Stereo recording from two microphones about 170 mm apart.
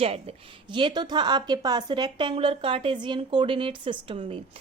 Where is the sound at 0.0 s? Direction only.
35° right (ahead or behind).